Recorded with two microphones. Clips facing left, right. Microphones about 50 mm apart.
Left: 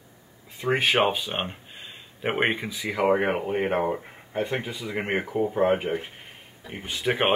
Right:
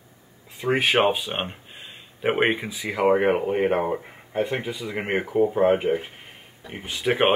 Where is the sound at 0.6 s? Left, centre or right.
Centre.